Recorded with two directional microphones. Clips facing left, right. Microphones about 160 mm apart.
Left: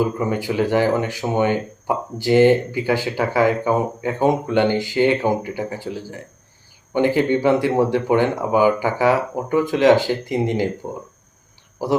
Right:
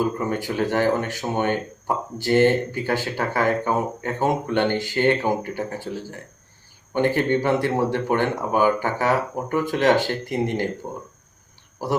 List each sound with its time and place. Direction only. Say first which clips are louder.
0.0 s speech: left 3 dB; 15° left (ahead or behind)